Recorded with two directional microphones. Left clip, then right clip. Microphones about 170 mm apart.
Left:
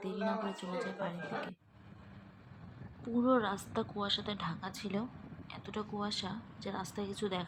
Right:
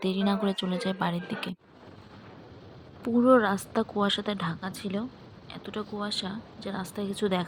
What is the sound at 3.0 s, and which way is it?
Speech, 35° right (ahead or behind).